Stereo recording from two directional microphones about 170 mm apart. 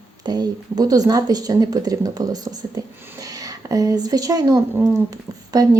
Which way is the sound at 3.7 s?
20° right (ahead or behind).